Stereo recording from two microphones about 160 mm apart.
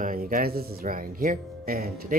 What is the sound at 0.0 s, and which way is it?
Speech, 60° right (ahead or behind).